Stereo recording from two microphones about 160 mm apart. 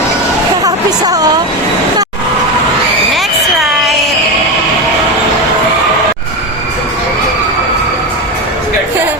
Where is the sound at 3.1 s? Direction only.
Centre (ahead or behind).